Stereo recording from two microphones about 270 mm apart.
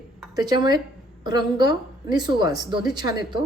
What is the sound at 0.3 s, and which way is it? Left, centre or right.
A man's voice, centre.